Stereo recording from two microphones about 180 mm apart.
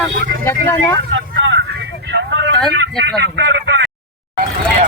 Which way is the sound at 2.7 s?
75° right (ahead or behind).